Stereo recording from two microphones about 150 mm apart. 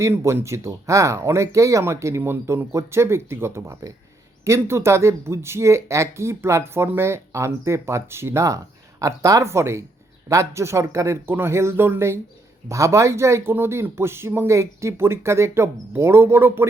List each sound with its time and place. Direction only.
0.0 s speech: 20° right (ahead or behind)